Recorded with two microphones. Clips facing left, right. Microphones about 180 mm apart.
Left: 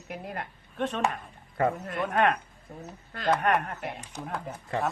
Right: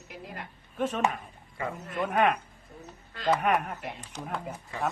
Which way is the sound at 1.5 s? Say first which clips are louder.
Left 8 dB; 55° left (ahead or behind).